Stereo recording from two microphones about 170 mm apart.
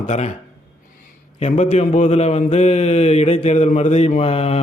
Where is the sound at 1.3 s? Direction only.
40° left (ahead or behind).